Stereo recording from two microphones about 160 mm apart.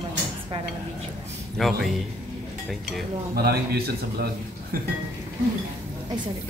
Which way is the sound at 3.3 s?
75° right (ahead or behind).